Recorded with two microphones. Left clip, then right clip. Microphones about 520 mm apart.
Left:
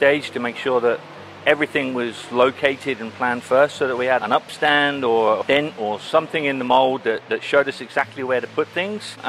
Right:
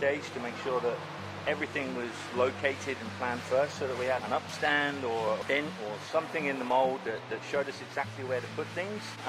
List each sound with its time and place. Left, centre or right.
0.7 s speech: left